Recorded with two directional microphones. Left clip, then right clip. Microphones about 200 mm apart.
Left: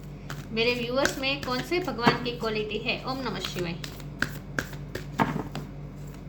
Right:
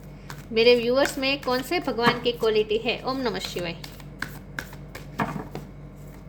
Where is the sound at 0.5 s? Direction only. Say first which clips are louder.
Right 8 dB; 60° right (ahead or behind).